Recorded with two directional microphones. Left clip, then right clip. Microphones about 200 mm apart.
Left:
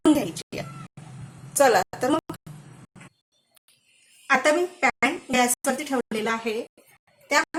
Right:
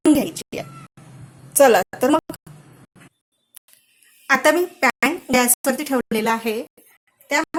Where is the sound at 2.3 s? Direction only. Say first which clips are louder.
Right 3 dB; centre (ahead or behind).